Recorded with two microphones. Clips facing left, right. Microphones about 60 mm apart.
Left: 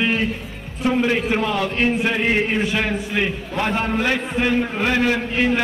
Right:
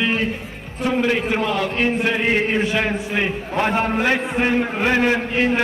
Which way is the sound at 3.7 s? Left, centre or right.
Right.